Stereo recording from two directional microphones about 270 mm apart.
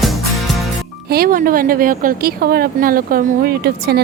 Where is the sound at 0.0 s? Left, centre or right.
Centre.